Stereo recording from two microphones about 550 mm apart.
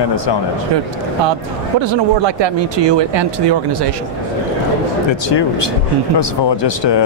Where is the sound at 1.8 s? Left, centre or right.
Right.